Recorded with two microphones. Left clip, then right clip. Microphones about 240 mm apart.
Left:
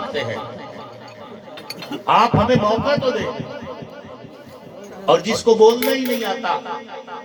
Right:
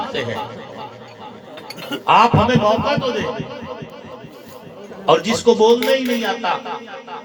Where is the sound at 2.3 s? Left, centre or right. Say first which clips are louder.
Right 1 dB; right.